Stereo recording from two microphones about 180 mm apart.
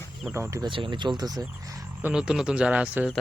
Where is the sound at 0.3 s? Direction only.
15° right (ahead or behind).